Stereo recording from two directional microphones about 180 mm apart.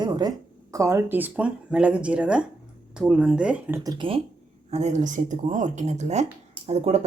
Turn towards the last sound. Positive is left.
turn(degrees=-35)  # may be behind; listen again after turning